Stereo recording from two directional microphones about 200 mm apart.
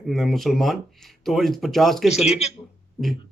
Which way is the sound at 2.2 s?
30° left (ahead or behind).